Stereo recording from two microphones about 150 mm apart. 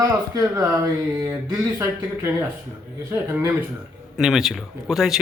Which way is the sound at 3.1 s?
20° right (ahead or behind).